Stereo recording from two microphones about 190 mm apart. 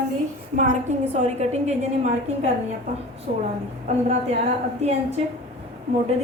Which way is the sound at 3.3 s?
40° right (ahead or behind).